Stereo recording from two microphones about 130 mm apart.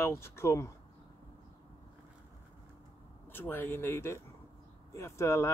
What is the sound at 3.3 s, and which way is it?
Speech, 15° left (ahead or behind).